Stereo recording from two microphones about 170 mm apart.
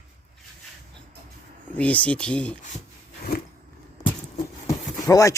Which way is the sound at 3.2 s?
65° left (ahead or behind).